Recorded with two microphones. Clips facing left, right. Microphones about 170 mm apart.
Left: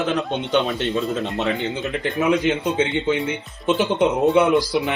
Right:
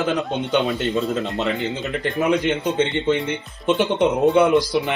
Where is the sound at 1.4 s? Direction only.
Centre (ahead or behind).